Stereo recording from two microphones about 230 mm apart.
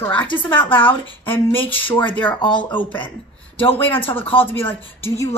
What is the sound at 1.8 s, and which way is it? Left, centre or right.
Speech, left.